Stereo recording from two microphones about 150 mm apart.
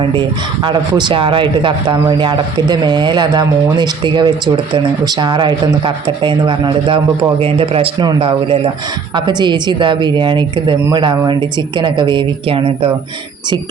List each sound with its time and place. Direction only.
0.0 s speech: 30° right (ahead or behind)